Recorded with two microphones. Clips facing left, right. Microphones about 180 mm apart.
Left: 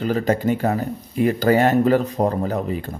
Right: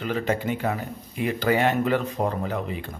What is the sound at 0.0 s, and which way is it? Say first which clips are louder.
Speech: left 6 dB; 40° left (ahead or behind).